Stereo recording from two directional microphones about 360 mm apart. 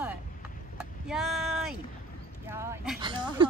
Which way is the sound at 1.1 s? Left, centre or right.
Centre.